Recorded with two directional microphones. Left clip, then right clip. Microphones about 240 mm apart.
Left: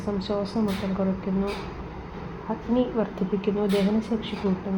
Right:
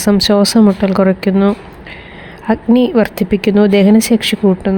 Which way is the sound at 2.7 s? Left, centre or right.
Right.